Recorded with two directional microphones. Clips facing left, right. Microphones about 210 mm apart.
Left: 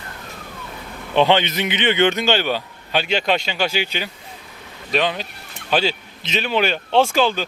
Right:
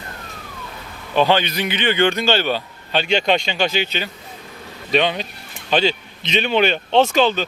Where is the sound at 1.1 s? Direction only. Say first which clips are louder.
Left 1 dB; 20° left (ahead or behind).